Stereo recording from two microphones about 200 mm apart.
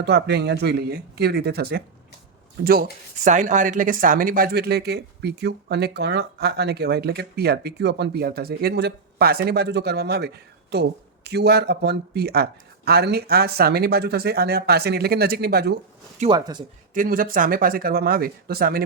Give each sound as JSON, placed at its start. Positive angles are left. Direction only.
{"t": 0.0, "sound": "speech", "side_deg": -55}
{"t": 16.3, "sound": "speech", "side_deg": -20}
{"t": 16.9, "sound": "speech", "side_deg": -40}